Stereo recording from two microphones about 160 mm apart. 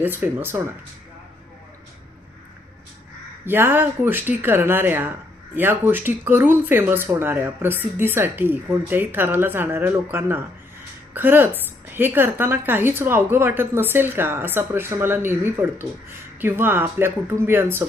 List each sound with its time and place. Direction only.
0.0 s a woman's voice: 10° right (ahead or behind)
3.4 s a woman's voice: 15° right (ahead or behind)